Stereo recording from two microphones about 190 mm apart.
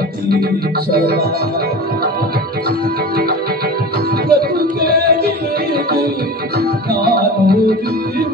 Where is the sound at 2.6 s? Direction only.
55° right (ahead or behind).